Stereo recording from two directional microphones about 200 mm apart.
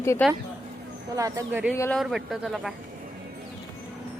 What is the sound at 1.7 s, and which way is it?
Speech, 5° left (ahead or behind).